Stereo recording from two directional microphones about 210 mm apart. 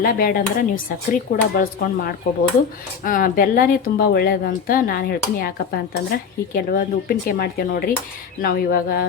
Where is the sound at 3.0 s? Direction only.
40° left (ahead or behind).